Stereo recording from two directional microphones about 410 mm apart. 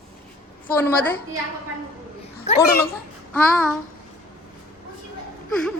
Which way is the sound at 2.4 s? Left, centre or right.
Centre.